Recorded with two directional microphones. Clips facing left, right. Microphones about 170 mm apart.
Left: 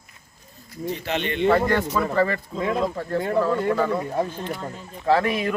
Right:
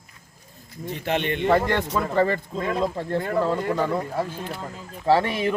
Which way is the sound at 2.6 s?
Centre (ahead or behind).